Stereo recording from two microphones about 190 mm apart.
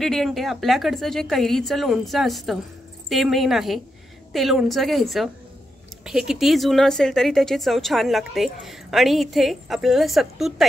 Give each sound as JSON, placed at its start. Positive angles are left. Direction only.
{"t": 0.0, "sound": "speech", "side_deg": 0}